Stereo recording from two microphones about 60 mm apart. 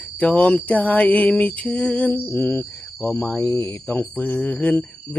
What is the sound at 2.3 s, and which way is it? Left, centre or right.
Speech, left.